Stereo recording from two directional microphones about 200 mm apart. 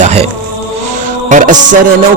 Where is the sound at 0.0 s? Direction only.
35° right (ahead or behind).